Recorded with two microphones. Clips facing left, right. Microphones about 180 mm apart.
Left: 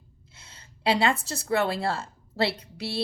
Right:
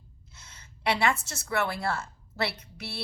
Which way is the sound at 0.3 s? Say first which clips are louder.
Left 1 dB; 30° left (ahead or behind).